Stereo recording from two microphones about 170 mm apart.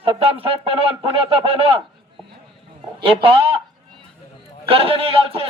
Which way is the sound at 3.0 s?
35° right (ahead or behind).